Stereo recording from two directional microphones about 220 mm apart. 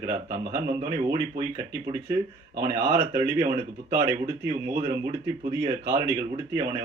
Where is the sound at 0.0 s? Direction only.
15° right (ahead or behind).